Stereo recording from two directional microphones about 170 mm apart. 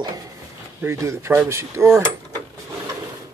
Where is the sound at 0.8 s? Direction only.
15° right (ahead or behind).